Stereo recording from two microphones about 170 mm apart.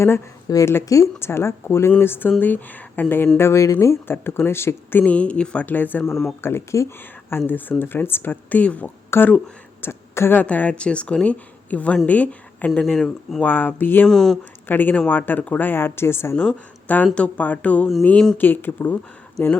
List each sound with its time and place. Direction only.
0.0 s speech: 20° left (ahead or behind)
6.4 s speech: 15° left (ahead or behind)